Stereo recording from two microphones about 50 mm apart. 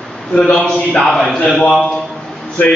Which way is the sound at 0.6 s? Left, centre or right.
Centre.